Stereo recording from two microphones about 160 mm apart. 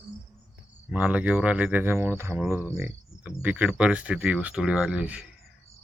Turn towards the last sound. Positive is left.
turn(degrees=-5)  # may be behind; listen again after turning